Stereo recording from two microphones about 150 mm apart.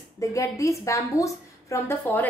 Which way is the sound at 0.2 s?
20° left (ahead or behind).